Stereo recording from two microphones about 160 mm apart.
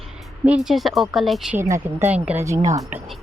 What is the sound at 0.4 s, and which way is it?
Speech, 5° right (ahead or behind).